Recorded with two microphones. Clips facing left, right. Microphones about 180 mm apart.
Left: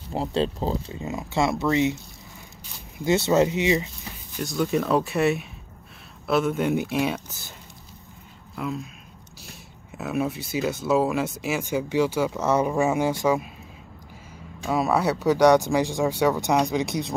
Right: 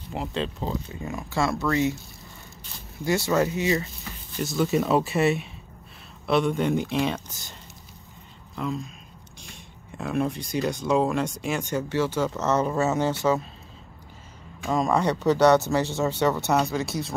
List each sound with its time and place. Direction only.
0.1 s speech: 30° left (ahead or behind)
3.1 s speech: 20° left (ahead or behind)
4.4 s speech: centre (ahead or behind)
8.5 s speech: 5° left (ahead or behind)
14.7 s speech: 5° left (ahead or behind)